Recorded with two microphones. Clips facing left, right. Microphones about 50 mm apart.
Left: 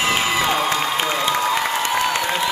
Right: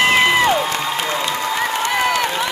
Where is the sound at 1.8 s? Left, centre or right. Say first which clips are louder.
Right 2 dB; right.